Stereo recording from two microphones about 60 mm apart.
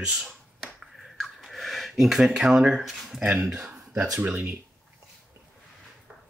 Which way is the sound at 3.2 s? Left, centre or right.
Centre.